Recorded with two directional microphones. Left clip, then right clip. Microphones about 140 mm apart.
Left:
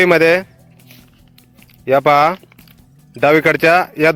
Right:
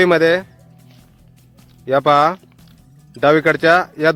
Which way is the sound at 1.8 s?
20° left (ahead or behind).